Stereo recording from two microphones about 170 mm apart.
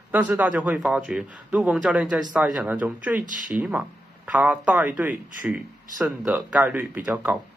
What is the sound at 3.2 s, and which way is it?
Speech, 50° right (ahead or behind).